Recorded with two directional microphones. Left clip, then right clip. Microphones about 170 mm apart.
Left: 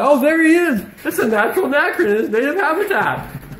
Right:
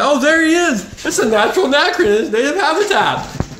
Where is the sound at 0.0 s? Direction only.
10° left (ahead or behind).